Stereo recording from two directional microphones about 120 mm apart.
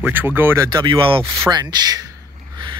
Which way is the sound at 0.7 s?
45° right (ahead or behind).